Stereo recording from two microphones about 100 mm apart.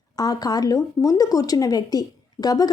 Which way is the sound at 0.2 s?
40° left (ahead or behind).